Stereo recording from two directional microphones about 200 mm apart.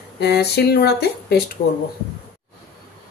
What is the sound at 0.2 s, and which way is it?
Speech, 55° left (ahead or behind).